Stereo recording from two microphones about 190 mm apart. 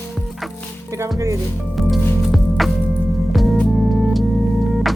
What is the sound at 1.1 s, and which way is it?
Speech, 15° right (ahead or behind).